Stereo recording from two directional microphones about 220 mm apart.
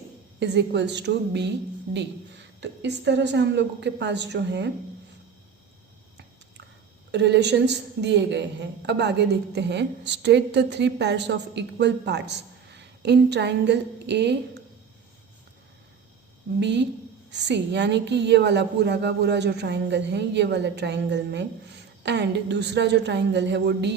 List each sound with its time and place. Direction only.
0.3 s a woman's voice: 50° right (ahead or behind)
7.1 s a woman's voice: 50° right (ahead or behind)
16.6 s a woman's voice: 50° right (ahead or behind)